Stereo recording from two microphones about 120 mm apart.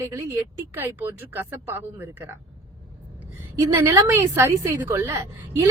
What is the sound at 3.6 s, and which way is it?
A woman's voice, 20° right (ahead or behind).